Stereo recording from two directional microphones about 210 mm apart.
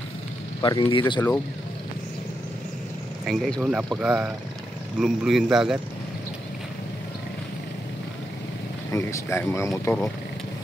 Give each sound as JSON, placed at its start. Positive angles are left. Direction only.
{"t": 0.6, "sound": "speech", "side_deg": 25}
{"t": 3.3, "sound": "a man's voice", "side_deg": 0}
{"t": 8.9, "sound": "speech", "side_deg": 15}